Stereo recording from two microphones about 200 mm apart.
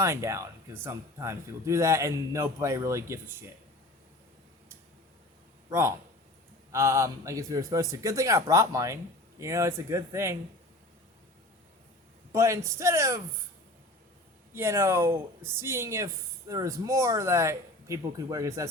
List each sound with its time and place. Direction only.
0.0 s speech: 15° right (ahead or behind)
5.6 s a man's voice: 15° right (ahead or behind)
12.3 s speech: 15° right (ahead or behind)
14.5 s speech: 10° right (ahead or behind)